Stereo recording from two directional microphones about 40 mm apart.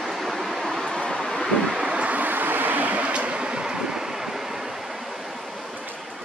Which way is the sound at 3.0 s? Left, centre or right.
Right.